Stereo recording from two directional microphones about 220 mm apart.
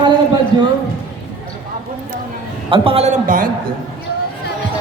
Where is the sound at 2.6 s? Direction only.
25° right (ahead or behind).